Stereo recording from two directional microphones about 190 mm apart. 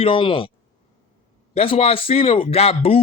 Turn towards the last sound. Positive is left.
turn(degrees=30)  # may be behind; listen again after turning